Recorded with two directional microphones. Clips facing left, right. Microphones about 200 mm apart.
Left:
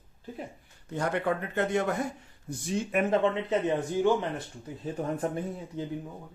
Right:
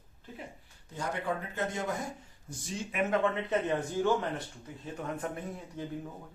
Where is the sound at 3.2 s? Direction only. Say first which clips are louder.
Left 3 dB; 20° left (ahead or behind).